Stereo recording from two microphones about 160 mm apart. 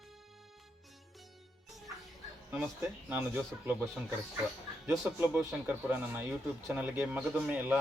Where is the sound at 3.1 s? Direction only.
10° right (ahead or behind).